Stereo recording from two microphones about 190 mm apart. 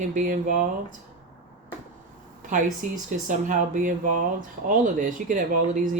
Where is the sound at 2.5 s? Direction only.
45° right (ahead or behind).